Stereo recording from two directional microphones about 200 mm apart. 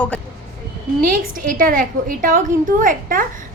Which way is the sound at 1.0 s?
45° right (ahead or behind).